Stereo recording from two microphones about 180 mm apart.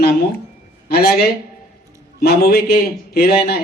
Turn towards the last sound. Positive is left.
turn(degrees=60)  # may be behind; listen again after turning